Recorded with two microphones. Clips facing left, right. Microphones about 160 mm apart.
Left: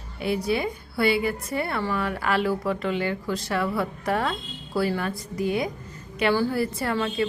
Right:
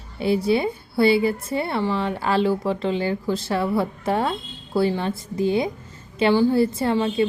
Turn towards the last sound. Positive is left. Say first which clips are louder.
# right 5 dB
turn(degrees=-25)  # may be behind; listen again after turning